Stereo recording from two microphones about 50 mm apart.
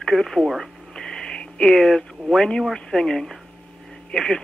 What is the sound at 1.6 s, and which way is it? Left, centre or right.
Speech, centre.